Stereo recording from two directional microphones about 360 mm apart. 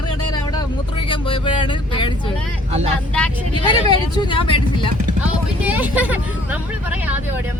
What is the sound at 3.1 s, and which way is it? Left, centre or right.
Speech, centre.